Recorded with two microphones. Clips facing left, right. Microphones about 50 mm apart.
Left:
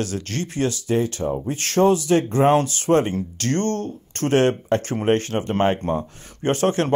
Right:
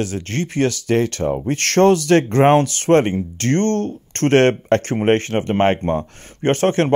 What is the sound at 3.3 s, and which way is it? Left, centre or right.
Speech, right.